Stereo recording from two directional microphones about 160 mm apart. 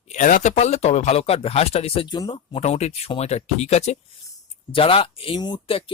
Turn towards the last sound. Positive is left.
turn(degrees=35)  # may be behind; listen again after turning